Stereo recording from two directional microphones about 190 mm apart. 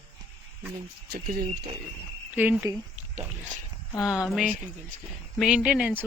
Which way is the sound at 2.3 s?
10° right (ahead or behind).